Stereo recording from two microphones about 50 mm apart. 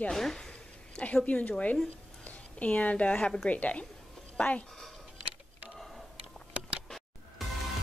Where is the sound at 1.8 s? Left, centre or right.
Left.